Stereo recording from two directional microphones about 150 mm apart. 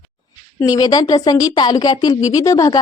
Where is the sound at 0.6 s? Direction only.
25° left (ahead or behind).